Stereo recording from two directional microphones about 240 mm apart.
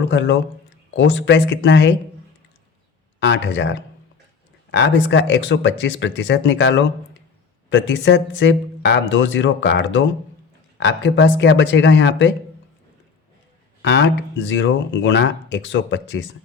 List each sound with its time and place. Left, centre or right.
0.1 s speech: left
3.2 s speech: left
13.8 s speech: left